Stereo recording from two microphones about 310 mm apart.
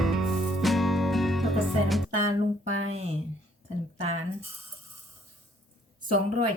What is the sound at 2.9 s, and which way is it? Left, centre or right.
Speech, centre.